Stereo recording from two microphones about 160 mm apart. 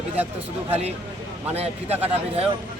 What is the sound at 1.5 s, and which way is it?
Speech, 40° right (ahead or behind).